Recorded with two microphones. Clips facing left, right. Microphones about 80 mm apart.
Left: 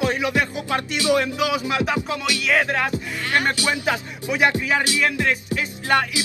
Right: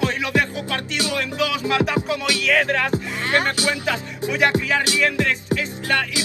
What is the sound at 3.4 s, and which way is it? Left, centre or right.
Music, left.